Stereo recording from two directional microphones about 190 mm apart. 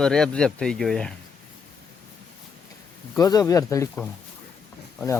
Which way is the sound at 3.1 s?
20° left (ahead or behind).